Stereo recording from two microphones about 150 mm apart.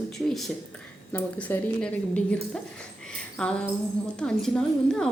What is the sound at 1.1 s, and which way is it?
A woman's voice, 15° left (ahead or behind).